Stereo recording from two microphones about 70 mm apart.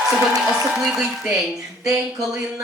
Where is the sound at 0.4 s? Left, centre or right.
Centre.